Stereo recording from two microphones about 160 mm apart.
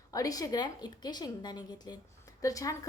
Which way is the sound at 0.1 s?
20° left (ahead or behind).